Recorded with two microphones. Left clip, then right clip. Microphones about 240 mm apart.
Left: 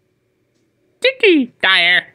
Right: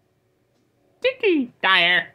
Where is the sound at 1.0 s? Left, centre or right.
Left.